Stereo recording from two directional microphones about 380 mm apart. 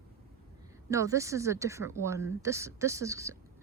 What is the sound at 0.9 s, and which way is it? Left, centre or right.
Speech, centre.